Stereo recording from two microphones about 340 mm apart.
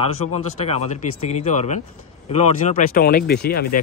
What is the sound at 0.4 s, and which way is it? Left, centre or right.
Speech, centre.